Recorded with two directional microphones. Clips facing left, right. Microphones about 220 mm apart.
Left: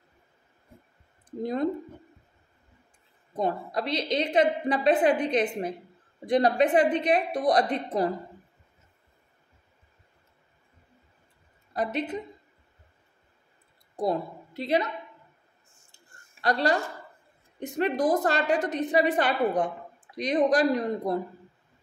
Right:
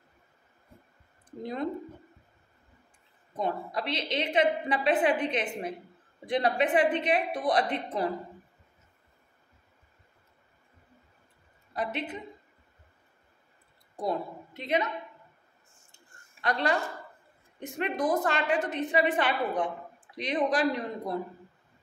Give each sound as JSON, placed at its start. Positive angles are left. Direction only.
{"t": 3.3, "sound": "a woman's voice", "side_deg": 40}
{"t": 11.7, "sound": "a woman's voice", "side_deg": 40}
{"t": 13.9, "sound": "a woman's voice", "side_deg": 35}
{"t": 16.3, "sound": "a woman's voice", "side_deg": 35}
{"t": 17.7, "sound": "a woman's voice", "side_deg": 35}